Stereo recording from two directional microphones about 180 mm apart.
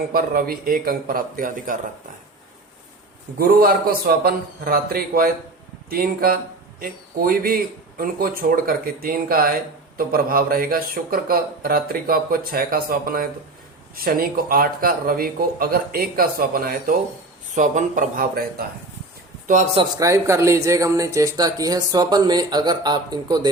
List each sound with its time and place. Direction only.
0.1 s speech: 55° right (ahead or behind)
3.3 s a man's voice: 55° right (ahead or behind)
20.0 s speech: 15° right (ahead or behind)